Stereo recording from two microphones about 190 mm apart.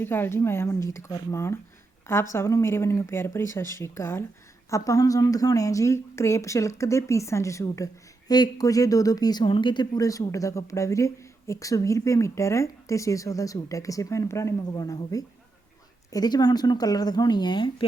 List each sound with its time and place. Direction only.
0.0 s speech: 10° left (ahead or behind)